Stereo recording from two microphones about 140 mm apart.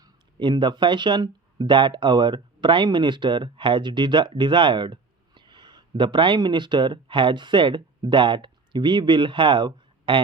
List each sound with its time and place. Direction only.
0.0 s speech: 30° right (ahead or behind)